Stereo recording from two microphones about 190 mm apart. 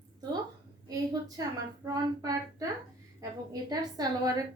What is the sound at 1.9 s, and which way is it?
Speech, 20° right (ahead or behind).